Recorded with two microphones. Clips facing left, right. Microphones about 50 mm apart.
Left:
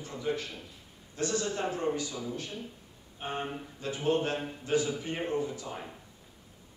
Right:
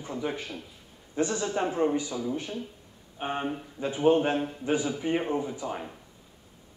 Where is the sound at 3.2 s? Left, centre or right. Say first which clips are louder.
Right 4 dB; centre.